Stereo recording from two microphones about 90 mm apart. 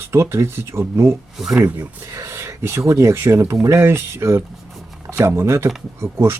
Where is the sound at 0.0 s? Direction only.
30° right (ahead or behind).